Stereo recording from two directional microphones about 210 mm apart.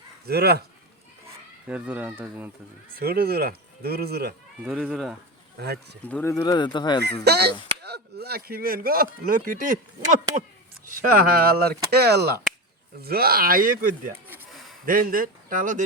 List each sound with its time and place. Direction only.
0.3 s speech: 50° right (ahead or behind)
1.6 s speech: 5° right (ahead or behind)
2.9 s speech: 45° right (ahead or behind)
4.6 s speech: 5° right (ahead or behind)
5.5 s speech: 50° right (ahead or behind)
6.1 s speech: 5° left (ahead or behind)
6.3 s speech: 20° left (ahead or behind)
7.3 s a man's voice: 50° right (ahead or behind)
14.3 s a sound: 5° right (ahead or behind)
14.8 s a man's voice: 40° right (ahead or behind)